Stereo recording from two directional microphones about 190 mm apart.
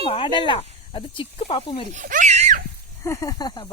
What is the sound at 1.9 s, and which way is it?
Speech, 40° right (ahead or behind).